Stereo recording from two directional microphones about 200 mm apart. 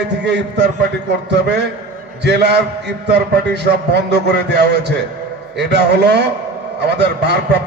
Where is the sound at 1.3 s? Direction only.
55° right (ahead or behind).